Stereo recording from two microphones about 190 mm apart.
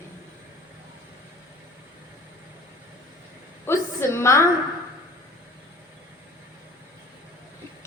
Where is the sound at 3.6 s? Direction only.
15° left (ahead or behind).